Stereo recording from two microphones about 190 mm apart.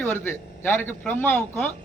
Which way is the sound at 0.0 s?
10° left (ahead or behind).